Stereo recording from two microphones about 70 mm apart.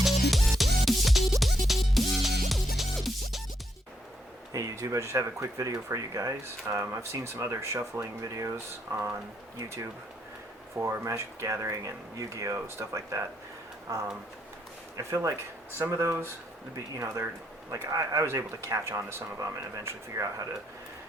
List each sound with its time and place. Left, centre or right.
0.0 s music: centre
4.5 s speech: right
10.8 s speech: right
12.5 s speech: right
15.1 s speech: right
15.9 s speech: right
18.9 s speech: right
19.4 s speech: right